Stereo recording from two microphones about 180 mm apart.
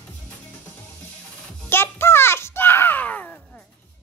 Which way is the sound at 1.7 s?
15° left (ahead or behind).